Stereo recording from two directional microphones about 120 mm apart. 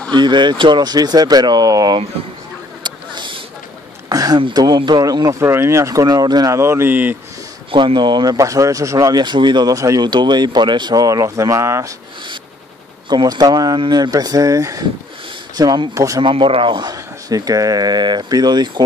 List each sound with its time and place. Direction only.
0.1 s speech: 40° right (ahead or behind)
2.8 s a sound: 40° right (ahead or behind)
4.1 s speech: 30° right (ahead or behind)
7.7 s speech: 40° right (ahead or behind); by 11.9 s 25° right (ahead or behind)
13.1 s speech: 35° right (ahead or behind)
16.2 s speech: 45° right (ahead or behind)